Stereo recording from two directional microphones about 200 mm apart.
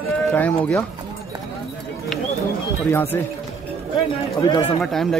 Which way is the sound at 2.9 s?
10° left (ahead or behind).